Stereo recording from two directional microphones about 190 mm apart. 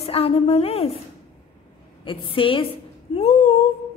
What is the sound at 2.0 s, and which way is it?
Speech, 25° left (ahead or behind).